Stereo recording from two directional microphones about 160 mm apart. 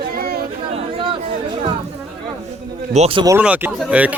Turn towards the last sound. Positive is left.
turn(degrees=-10)  # may be behind; listen again after turning